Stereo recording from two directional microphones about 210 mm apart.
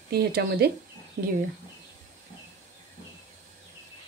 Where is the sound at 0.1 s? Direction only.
50° right (ahead or behind).